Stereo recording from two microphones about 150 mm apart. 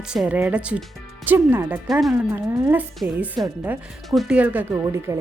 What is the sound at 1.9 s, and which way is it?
Speech, centre (ahead or behind).